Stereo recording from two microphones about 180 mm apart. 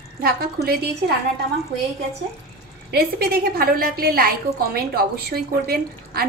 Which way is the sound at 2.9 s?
60° right (ahead or behind).